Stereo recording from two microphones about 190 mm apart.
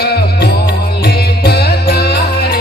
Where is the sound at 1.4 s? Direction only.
60° left (ahead or behind).